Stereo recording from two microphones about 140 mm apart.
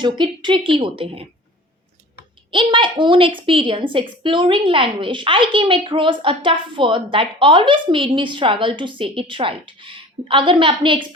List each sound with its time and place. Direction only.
0.0 s a woman's voice: 35° right (ahead or behind)
2.5 s a woman's voice: 35° right (ahead or behind)